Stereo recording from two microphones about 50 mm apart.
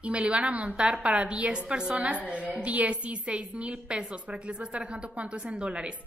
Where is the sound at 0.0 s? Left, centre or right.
Right.